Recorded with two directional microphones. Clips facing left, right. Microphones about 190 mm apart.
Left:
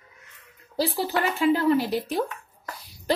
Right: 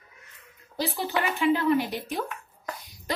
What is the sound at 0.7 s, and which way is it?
A woman's voice, 35° left (ahead or behind).